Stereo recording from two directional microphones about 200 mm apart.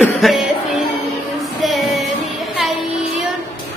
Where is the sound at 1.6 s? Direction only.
Centre (ahead or behind).